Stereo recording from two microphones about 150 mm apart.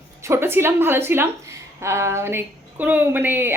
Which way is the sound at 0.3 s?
15° right (ahead or behind).